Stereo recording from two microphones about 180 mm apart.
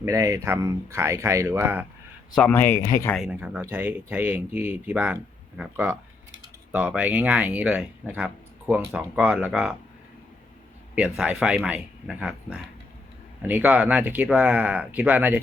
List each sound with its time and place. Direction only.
0.0 s speech: 15° right (ahead or behind)
2.3 s speech: 10° left (ahead or behind)
3.2 s speech: 5° right (ahead or behind)
10.9 s a man's voice: 5° right (ahead or behind)